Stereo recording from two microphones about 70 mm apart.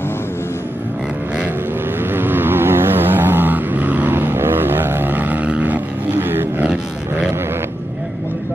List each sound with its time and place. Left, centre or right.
2.0 s vehicle: right